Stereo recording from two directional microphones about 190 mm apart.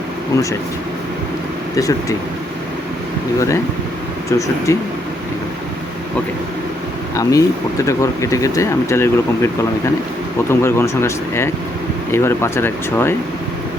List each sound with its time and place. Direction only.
1.7 s speech: 20° left (ahead or behind)
4.3 s speech: 15° left (ahead or behind)
7.2 s speech: 15° left (ahead or behind)
10.5 s speech: 15° left (ahead or behind)